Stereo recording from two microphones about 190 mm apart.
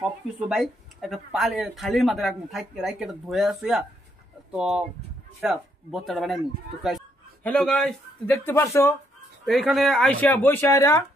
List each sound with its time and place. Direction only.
0.5 s speech: centre (ahead or behind)
9.5 s speech: centre (ahead or behind)